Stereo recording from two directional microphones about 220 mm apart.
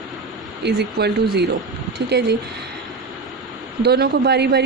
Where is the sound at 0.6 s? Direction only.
50° right (ahead or behind).